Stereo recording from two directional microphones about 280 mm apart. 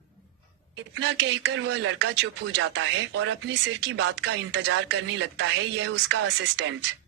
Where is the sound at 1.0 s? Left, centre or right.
Right.